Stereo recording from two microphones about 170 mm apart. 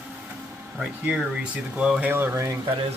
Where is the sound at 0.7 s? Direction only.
5° right (ahead or behind).